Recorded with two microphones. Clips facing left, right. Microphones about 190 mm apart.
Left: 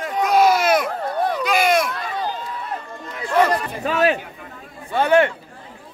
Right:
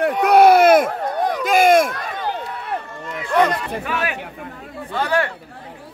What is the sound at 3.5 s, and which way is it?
Speech, 30° left (ahead or behind).